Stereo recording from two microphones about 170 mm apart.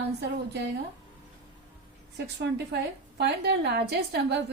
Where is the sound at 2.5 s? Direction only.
75° right (ahead or behind).